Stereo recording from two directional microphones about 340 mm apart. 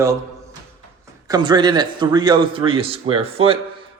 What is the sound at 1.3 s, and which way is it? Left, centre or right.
Speech, centre.